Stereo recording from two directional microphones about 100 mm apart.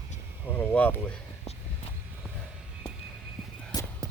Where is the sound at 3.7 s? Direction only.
45° left (ahead or behind).